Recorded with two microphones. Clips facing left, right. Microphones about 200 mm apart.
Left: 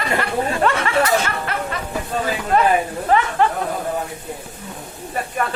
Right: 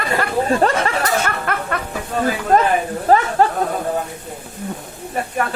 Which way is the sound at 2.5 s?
40° right (ahead or behind).